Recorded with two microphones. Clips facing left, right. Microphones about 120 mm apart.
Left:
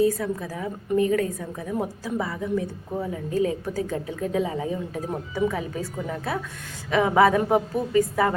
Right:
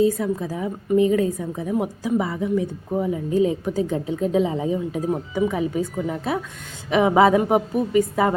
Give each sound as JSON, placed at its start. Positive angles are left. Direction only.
{"t": 0.0, "sound": "a woman's voice", "side_deg": -20}